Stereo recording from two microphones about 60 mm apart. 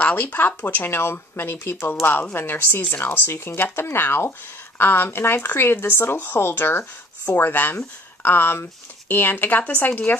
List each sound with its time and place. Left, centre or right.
0.0 s speech: left